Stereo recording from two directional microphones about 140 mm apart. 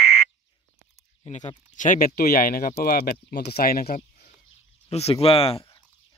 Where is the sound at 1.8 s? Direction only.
75° left (ahead or behind); by 3.8 s 90° left.